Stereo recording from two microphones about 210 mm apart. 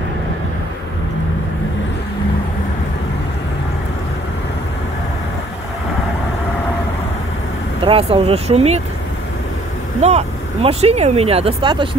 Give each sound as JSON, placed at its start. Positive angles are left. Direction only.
{"t": 7.8, "sound": "speech", "side_deg": -25}
{"t": 10.0, "sound": "speech", "side_deg": -30}